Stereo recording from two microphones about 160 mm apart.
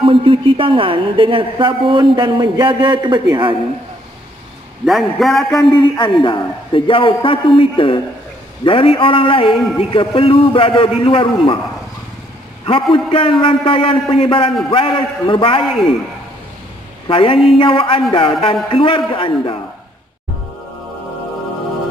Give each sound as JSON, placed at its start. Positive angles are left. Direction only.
{"t": 0.0, "sound": "a woman's voice", "side_deg": -35}
{"t": 4.8, "sound": "a man's voice", "side_deg": 0}
{"t": 5.7, "sound": "a man's voice", "side_deg": 30}
{"t": 12.9, "sound": "a man's voice", "side_deg": 35}
{"t": 15.6, "sound": "a man's voice", "side_deg": 0}
{"t": 17.1, "sound": "a man's voice", "side_deg": 35}